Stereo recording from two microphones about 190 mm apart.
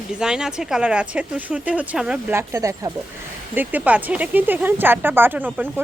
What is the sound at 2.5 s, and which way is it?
Speech, 15° right (ahead or behind).